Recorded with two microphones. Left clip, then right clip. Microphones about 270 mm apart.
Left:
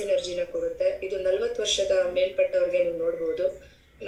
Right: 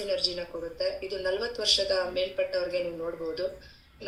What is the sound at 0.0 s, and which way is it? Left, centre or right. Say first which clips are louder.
A woman's voice: left 4 dB; centre.